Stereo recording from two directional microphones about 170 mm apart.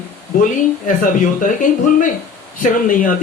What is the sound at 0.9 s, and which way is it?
Speech, 50° left (ahead or behind).